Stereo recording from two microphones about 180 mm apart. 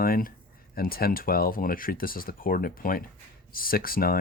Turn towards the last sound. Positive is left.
turn(degrees=55)  # may be behind; listen again after turning